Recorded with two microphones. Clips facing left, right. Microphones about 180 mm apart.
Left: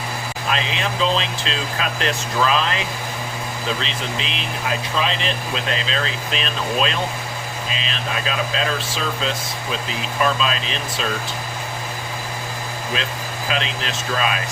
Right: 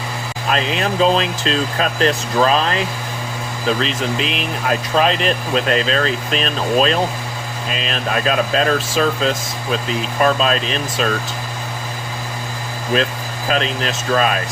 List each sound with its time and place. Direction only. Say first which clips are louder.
0.5 s speech: right 6 dB; 45° right (ahead or behind)
12.9 s speech: right 10 dB; 45° right (ahead or behind)